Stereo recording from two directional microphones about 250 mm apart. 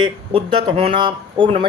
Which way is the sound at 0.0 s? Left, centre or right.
Right.